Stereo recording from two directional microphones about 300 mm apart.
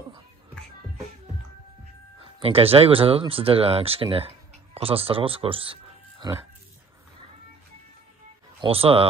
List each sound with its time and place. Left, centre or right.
2.2 s speech: centre
8.5 s speech: centre